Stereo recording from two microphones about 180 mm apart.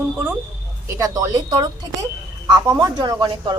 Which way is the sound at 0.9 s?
15° right (ahead or behind).